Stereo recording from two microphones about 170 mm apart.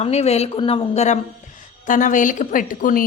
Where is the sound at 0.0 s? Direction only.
40° left (ahead or behind).